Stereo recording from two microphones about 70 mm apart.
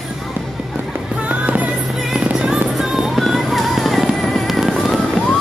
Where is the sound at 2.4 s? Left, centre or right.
Centre.